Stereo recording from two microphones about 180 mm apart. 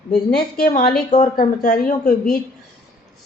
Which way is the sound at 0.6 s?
45° left (ahead or behind).